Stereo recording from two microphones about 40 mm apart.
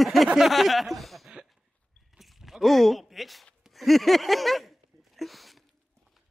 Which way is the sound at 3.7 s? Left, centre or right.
Centre.